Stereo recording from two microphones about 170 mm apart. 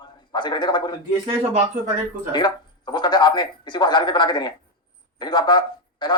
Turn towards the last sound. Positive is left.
turn(degrees=25)  # may be behind; listen again after turning